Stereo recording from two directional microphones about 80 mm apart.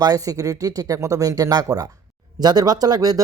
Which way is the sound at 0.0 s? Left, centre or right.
Right.